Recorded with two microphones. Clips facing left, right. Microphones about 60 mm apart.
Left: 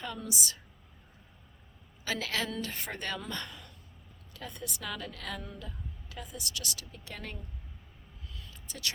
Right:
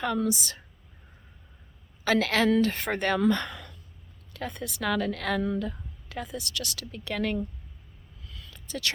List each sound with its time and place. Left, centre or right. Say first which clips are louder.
0.0 s a woman's voice: right 10 dB; right
2.0 s a woman's voice: right 11 dB; right
4.4 s a woman's voice: right 8 dB; right
8.4 s a sound: right 9 dB; right